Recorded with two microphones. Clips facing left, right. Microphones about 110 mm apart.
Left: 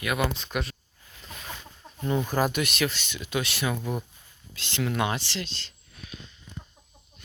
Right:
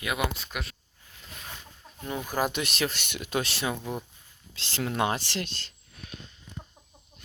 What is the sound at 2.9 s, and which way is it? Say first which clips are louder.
Speech: right 1 dB; 60° right (ahead or behind).